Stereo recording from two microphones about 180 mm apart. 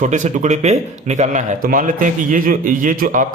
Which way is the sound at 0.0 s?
45° right (ahead or behind).